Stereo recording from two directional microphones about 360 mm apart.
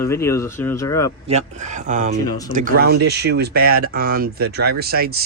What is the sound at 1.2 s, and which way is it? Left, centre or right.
Speech, centre.